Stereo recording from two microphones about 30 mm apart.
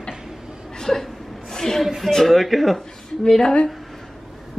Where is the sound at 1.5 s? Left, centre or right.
Centre.